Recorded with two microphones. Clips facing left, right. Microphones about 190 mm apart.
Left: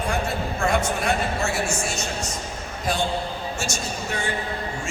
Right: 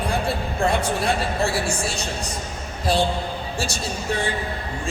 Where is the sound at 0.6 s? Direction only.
35° right (ahead or behind).